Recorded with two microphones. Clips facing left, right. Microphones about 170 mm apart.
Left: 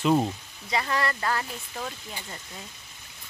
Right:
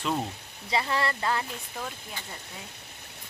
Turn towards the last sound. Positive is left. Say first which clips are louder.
# even
turn(degrees=-65)  # may be behind; listen again after turning